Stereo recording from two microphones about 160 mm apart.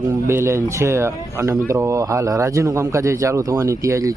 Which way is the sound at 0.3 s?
15° right (ahead or behind).